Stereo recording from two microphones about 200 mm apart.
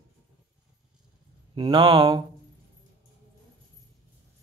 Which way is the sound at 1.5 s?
25° right (ahead or behind).